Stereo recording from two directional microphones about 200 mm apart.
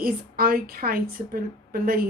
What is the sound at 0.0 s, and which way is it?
A woman's voice, 45° right (ahead or behind).